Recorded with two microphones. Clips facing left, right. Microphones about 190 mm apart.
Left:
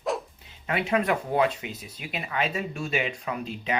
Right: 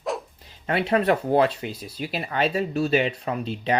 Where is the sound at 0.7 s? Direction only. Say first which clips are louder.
Right 4 dB; 30° right (ahead or behind).